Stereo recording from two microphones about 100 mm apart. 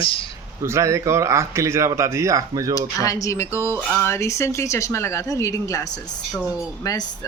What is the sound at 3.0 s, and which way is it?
Speech, 35° left (ahead or behind).